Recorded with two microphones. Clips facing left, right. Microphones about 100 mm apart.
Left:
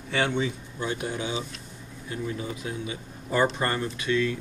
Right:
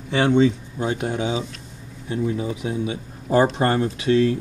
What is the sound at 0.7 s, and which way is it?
Speech, 40° right (ahead or behind).